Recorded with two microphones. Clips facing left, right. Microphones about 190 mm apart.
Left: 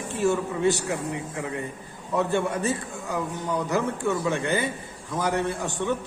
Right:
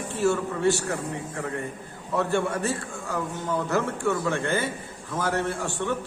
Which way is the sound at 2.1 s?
15° left (ahead or behind).